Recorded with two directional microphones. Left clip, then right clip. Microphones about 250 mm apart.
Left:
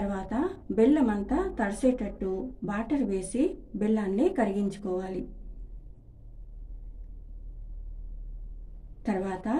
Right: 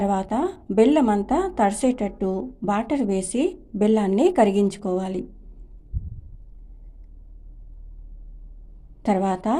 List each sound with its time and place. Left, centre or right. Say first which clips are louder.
0.1 s a woman's voice: right 8 dB; right
9.0 s a woman's voice: right 9 dB; right